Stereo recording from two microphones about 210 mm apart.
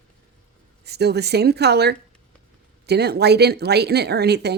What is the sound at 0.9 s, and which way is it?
Speech, 50° right (ahead or behind).